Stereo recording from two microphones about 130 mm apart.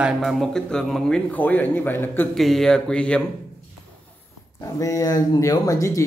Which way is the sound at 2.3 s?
Centre (ahead or behind).